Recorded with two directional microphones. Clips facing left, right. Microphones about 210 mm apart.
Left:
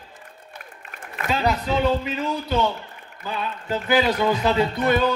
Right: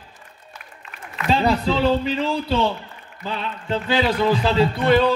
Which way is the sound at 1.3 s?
30° right (ahead or behind).